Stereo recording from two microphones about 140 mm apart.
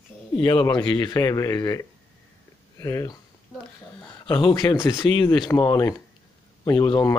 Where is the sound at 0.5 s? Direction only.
30° left (ahead or behind).